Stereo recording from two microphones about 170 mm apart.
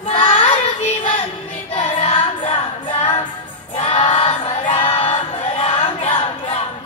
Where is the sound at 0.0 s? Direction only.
30° left (ahead or behind).